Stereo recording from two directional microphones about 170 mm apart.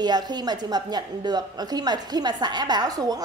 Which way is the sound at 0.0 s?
25° right (ahead or behind).